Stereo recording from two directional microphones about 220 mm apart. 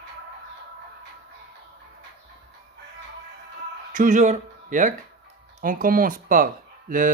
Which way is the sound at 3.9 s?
35° right (ahead or behind).